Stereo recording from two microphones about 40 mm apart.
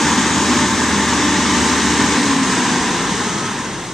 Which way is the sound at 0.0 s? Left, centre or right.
Centre.